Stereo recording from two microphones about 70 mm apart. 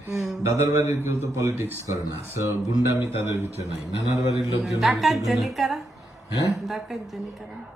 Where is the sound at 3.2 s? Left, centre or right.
Right.